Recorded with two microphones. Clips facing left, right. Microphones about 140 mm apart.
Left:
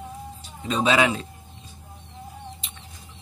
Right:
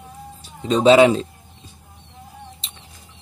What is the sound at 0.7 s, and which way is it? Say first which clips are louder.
Speech: right 9 dB; 30° right (ahead or behind).